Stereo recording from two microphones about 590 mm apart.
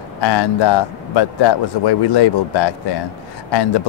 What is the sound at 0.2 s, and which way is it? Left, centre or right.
A man's voice, left.